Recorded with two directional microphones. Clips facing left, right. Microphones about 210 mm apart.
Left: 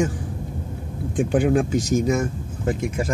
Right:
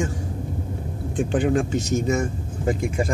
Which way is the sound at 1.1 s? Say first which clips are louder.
Left 2 dB; 10° left (ahead or behind).